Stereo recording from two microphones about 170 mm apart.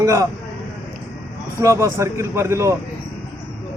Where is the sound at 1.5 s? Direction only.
20° right (ahead or behind).